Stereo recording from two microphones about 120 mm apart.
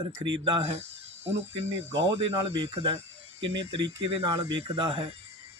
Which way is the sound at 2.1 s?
45° right (ahead or behind).